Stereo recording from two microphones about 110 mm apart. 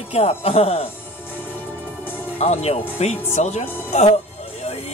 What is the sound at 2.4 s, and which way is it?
Speech, 75° left (ahead or behind).